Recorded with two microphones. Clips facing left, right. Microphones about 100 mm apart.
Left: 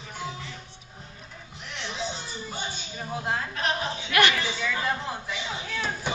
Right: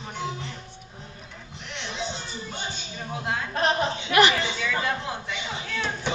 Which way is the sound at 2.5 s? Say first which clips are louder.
Even; centre (ahead or behind).